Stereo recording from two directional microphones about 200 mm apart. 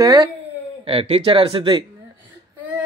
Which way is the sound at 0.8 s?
30° right (ahead or behind).